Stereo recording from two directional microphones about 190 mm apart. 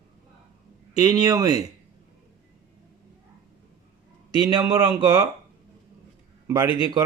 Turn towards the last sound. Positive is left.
turn(degrees=-25)  # may be behind; listen again after turning